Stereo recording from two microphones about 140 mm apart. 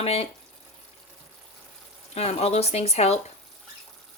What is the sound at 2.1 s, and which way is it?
Speech, 50° left (ahead or behind).